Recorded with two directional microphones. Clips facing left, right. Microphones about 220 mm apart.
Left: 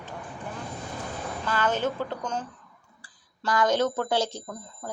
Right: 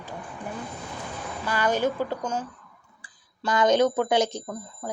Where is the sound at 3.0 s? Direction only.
20° right (ahead or behind).